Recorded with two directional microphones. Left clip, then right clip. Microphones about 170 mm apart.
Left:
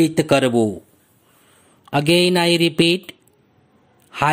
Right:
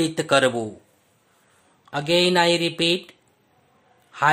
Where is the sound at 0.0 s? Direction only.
30° left (ahead or behind).